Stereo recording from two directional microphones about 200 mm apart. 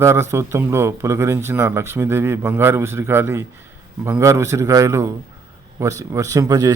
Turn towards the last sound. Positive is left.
turn(degrees=-15)  # may be behind; listen again after turning